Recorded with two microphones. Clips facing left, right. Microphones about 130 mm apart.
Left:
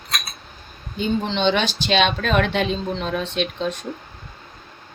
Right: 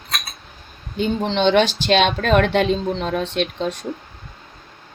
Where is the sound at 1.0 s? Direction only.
70° right (ahead or behind).